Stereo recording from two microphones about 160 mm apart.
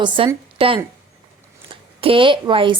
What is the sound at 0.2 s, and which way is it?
A woman's voice, 35° right (ahead or behind).